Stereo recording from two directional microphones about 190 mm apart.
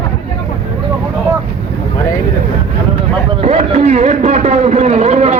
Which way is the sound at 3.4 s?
35° right (ahead or behind).